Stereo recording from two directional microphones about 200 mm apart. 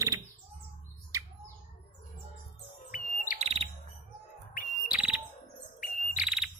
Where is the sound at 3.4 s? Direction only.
30° right (ahead or behind).